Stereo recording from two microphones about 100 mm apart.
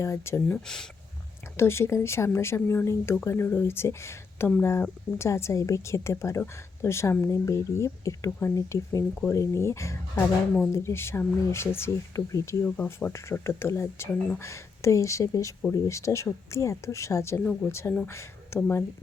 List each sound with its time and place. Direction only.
0.0 s speech: 25° left (ahead or behind)
0.5 s speech: 5° left (ahead or behind)
1.5 s speech: 25° left (ahead or behind)
12.6 s speech: 15° left (ahead or behind)